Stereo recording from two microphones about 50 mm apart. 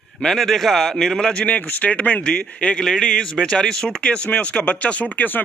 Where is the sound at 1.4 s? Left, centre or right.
Left.